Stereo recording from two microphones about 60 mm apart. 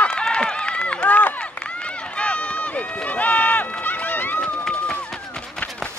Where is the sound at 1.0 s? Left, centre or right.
Left.